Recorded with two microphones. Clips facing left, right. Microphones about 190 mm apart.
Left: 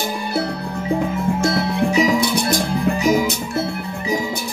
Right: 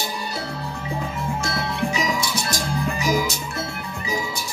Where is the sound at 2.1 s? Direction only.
60° left (ahead or behind).